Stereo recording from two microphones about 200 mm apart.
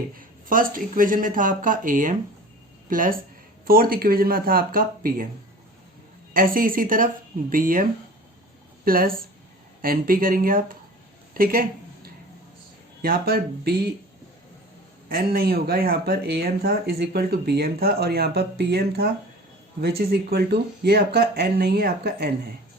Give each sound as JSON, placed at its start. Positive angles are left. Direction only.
{"t": 0.2, "sound": "speech", "side_deg": -45}
{"t": 6.3, "sound": "speech", "side_deg": -45}
{"t": 13.0, "sound": "speech", "side_deg": -50}
{"t": 15.1, "sound": "speech", "side_deg": -50}